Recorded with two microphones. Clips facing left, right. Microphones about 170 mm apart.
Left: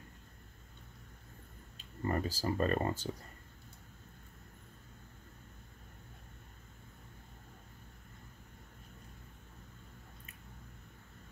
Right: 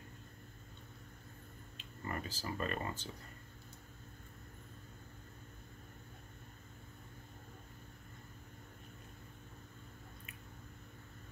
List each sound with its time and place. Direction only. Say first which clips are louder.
1.8 s speech: left 8 dB; 40° left (ahead or behind)